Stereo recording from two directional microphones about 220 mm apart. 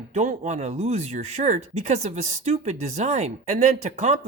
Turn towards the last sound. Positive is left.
turn(degrees=-30)  # may be behind; listen again after turning